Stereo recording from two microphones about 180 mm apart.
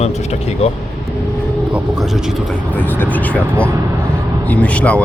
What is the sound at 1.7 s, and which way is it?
Speech, 5° right (ahead or behind).